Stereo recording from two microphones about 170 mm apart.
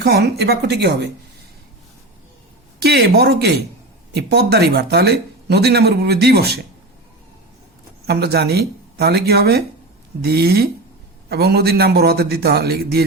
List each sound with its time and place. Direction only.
0.0 s speech: 75° right (ahead or behind)
2.8 s speech: 75° right (ahead or behind)
8.0 s speech: 70° right (ahead or behind)